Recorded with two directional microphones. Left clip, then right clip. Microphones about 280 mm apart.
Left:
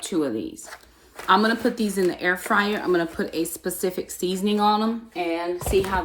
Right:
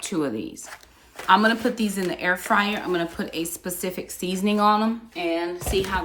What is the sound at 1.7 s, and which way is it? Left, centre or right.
Speech, right.